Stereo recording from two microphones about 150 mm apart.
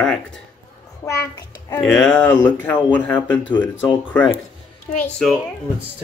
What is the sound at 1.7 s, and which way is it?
Speech, 5° left (ahead or behind).